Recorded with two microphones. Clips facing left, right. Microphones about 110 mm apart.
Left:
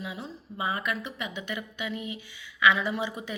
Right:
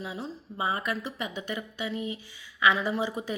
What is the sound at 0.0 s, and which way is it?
Speech, 35° right (ahead or behind).